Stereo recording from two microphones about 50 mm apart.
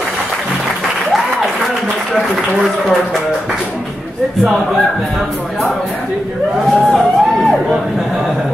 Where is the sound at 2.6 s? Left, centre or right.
Centre.